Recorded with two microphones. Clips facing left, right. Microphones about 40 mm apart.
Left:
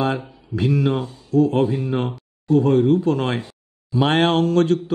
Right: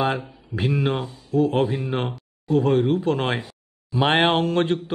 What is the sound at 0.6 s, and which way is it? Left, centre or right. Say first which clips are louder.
Speech: left 3 dB; right.